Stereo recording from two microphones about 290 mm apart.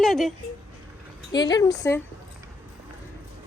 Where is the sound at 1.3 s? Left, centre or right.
Centre.